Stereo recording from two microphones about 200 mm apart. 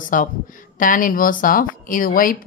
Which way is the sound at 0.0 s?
40° left (ahead or behind).